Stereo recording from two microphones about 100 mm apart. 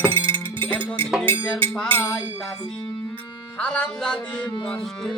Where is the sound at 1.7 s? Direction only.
15° left (ahead or behind).